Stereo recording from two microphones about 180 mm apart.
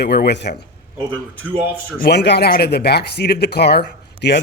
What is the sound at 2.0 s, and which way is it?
Speech, 70° left (ahead or behind).